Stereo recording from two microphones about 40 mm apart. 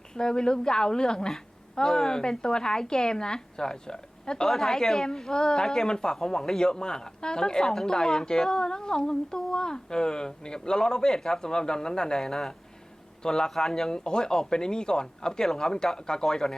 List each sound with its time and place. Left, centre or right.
0.1 s a man's voice: centre